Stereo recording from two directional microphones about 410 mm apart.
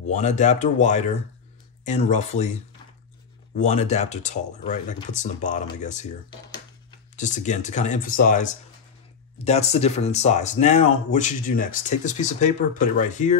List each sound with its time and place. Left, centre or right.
0.1 s speech: centre
3.5 s speech: centre
7.2 s speech: centre
9.4 s speech: centre